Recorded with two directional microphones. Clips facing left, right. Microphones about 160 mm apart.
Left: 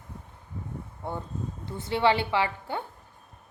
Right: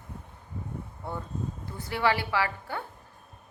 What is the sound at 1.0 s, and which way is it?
A woman's voice, 20° left (ahead or behind).